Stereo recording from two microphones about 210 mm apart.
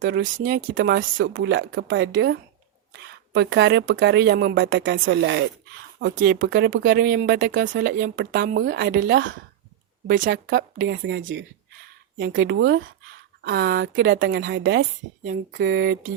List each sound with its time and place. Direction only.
0.0 s speech: 65° right (ahead or behind)
0.3 s speech: 40° right (ahead or behind)
0.7 s speech: 65° right (ahead or behind)
15.5 s a sound: 55° right (ahead or behind)